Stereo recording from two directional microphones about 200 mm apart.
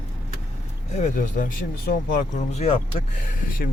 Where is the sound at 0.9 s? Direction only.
40° left (ahead or behind).